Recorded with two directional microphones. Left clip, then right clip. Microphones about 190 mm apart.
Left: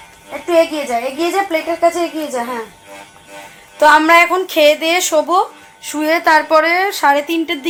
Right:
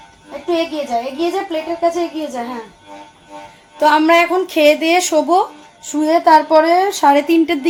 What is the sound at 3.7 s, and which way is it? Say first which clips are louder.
A woman's voice: left 3 dB; 5° left (ahead or behind).